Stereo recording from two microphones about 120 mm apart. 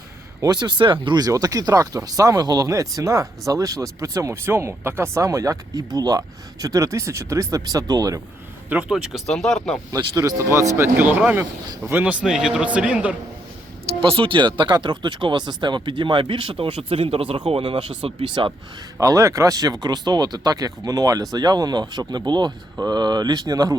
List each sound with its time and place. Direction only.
0.4 s speech: 40° right (ahead or behind)
8.7 s a man's voice: 10° right (ahead or behind)
9.9 s speech: 40° right (ahead or behind)
10.2 s a man's voice: 25° right (ahead or behind)
12.2 s a man's voice: 5° right (ahead or behind)
14.0 s speech: 50° right (ahead or behind)
17.5 s speech: 40° right (ahead or behind)
18.9 s speech: 25° right (ahead or behind)